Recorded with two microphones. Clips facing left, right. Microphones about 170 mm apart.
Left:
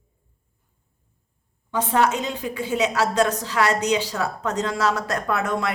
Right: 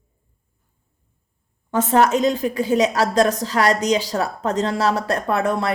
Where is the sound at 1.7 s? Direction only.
45° right (ahead or behind).